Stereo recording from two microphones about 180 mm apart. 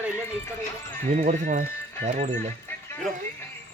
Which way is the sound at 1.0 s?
45° right (ahead or behind).